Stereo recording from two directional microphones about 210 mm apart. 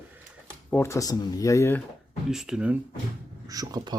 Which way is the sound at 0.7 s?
15° left (ahead or behind).